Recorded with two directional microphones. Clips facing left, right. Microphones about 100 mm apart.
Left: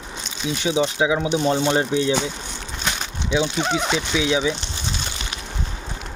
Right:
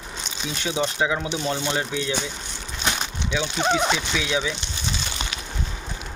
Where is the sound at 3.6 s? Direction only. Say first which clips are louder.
Right 1 dB; 10° right (ahead or behind).